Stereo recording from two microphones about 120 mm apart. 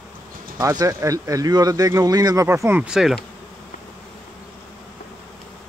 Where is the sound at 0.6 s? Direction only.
30° right (ahead or behind).